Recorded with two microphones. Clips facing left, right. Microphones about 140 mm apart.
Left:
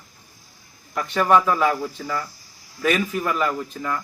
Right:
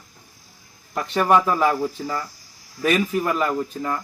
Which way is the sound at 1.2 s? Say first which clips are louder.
Even; 10° right (ahead or behind).